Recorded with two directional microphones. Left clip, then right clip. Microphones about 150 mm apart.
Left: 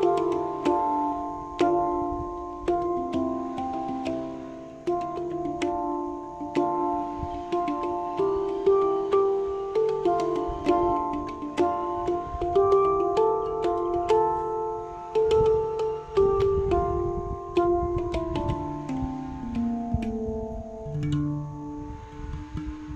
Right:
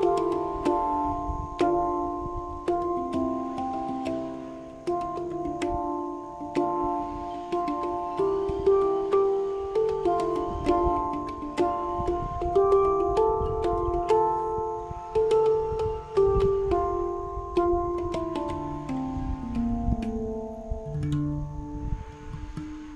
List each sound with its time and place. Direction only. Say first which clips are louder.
0.0 s music: left 1 dB; 15° left (ahead or behind)
17.9 s music: left 1 dB; 15° left (ahead or behind)